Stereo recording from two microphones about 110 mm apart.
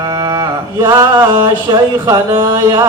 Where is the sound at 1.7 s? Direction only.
40° right (ahead or behind).